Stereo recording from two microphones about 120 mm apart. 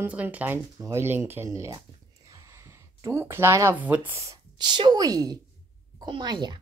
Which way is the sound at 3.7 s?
15° right (ahead or behind).